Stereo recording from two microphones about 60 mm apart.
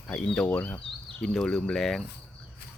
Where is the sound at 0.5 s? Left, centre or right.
Left.